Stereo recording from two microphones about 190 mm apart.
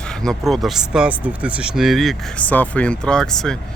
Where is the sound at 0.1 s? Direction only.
5° left (ahead or behind).